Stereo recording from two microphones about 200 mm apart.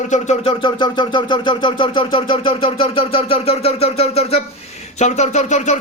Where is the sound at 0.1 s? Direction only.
30° left (ahead or behind).